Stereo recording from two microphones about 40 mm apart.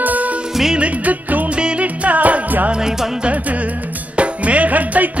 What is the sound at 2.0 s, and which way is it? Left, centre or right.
Music, right.